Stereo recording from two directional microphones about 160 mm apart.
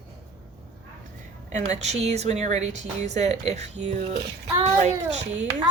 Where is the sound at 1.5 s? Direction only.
45° right (ahead or behind).